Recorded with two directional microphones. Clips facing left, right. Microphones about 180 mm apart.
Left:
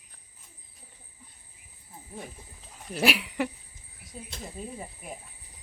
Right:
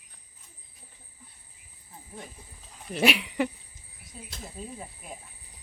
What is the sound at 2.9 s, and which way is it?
Speech, centre (ahead or behind).